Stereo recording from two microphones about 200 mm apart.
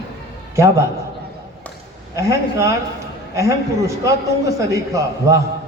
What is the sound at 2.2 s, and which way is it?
A man's voice, 15° right (ahead or behind).